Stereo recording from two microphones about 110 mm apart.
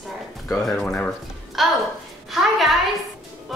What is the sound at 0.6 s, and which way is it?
Speech, 5° left (ahead or behind).